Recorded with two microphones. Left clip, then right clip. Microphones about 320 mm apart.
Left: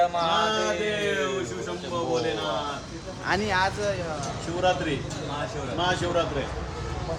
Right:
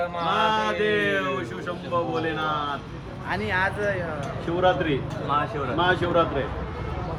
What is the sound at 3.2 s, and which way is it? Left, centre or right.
Speech, left.